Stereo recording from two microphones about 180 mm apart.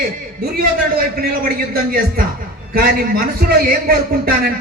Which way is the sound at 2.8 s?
55° right (ahead or behind).